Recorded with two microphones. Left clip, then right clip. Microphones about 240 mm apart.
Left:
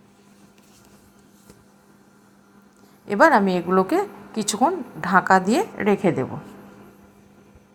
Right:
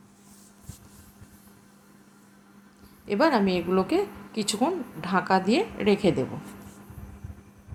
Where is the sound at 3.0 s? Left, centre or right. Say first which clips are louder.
Left 7 dB; centre.